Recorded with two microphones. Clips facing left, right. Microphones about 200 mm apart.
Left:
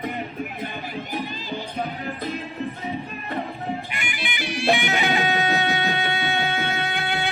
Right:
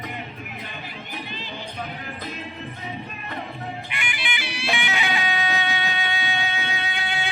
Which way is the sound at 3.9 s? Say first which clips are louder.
Left 1 dB; 45° left (ahead or behind).